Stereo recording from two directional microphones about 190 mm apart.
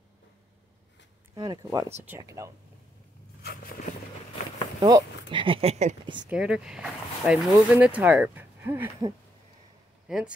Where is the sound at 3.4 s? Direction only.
55° left (ahead or behind).